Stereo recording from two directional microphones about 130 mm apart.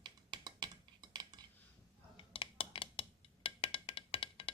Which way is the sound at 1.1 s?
35° right (ahead or behind).